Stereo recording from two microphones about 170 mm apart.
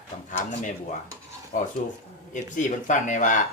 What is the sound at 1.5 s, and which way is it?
Speech, 50° left (ahead or behind).